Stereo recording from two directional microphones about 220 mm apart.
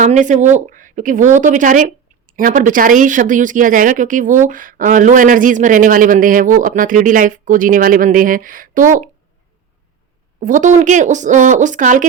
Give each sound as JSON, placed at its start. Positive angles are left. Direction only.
{"t": 0.0, "sound": "speech", "side_deg": -35}
{"t": 10.4, "sound": "speech", "side_deg": -35}